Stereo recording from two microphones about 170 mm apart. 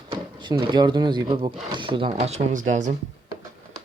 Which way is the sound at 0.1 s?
30° right (ahead or behind).